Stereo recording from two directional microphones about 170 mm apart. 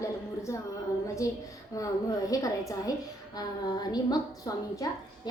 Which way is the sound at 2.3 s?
20° left (ahead or behind).